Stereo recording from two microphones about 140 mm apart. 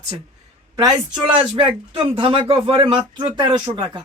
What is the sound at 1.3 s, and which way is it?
Speech, 40° right (ahead or behind).